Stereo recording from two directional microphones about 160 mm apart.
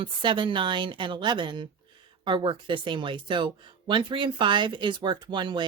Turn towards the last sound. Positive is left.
turn(degrees=-30)  # may be behind; listen again after turning